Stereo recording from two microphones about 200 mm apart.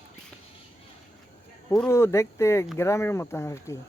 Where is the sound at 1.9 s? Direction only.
15° left (ahead or behind).